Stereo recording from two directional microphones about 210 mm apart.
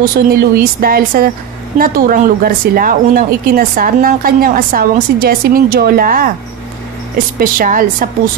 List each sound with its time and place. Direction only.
0.0 s speech: 45° right (ahead or behind)
7.3 s a woman's voice: 40° right (ahead or behind)